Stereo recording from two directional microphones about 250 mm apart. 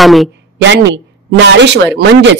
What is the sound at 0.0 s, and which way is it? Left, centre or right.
Speech, centre.